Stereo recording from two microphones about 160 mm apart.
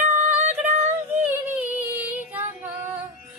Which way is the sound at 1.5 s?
10° right (ahead or behind).